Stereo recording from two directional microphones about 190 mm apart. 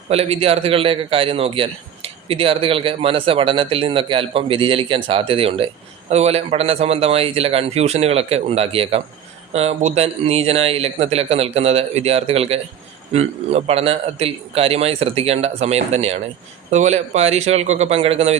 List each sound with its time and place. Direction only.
0.1 s a man's voice: 30° right (ahead or behind)